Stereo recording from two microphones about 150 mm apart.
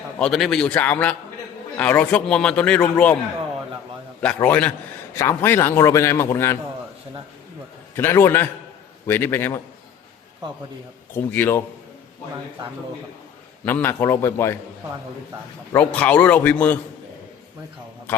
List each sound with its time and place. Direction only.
0.2 s a man's voice: centre (ahead or behind)
4.2 s a man's voice: 10° left (ahead or behind)
7.9 s a man's voice: 15° left (ahead or behind)
11.1 s a man's voice: 15° left (ahead or behind)
13.7 s a man's voice: 15° left (ahead or behind)
15.7 s a man's voice: 10° left (ahead or behind)